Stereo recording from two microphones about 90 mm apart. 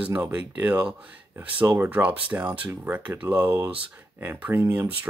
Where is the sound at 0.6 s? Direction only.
15° right (ahead or behind).